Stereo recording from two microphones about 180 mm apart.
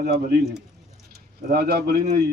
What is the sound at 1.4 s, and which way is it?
Speech, 55° right (ahead or behind).